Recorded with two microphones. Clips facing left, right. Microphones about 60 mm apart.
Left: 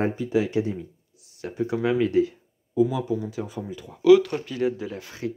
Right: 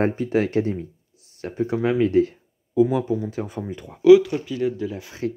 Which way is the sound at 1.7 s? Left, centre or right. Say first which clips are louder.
Right 2 dB; right.